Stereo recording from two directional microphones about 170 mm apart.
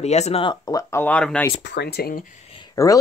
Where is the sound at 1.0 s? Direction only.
5° left (ahead or behind).